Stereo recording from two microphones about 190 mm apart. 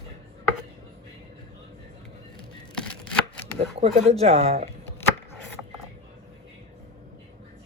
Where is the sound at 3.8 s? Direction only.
30° right (ahead or behind).